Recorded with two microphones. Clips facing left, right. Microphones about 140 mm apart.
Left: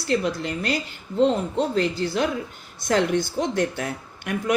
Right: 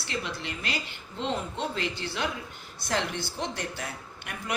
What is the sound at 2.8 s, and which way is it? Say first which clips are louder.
Speech: left 9 dB; 50° left (ahead or behind).